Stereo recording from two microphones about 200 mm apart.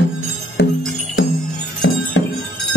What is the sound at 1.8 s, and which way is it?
Music, 60° left (ahead or behind).